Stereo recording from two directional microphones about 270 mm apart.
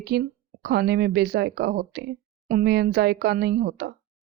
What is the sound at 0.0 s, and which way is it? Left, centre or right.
Speech, right.